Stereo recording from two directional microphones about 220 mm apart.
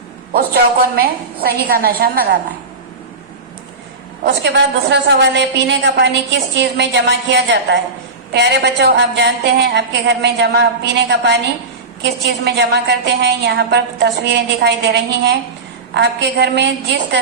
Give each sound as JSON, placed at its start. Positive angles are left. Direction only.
{"t": 0.3, "sound": "a woman's voice", "side_deg": -45}
{"t": 4.2, "sound": "a woman's voice", "side_deg": -50}